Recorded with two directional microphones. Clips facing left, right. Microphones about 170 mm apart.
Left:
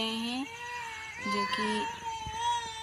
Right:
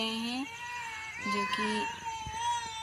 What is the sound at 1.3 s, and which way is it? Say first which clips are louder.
Speech: left 1 dB; 35° left (ahead or behind).